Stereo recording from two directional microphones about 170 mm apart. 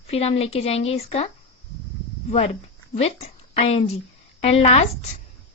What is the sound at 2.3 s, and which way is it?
A woman's voice, 35° left (ahead or behind).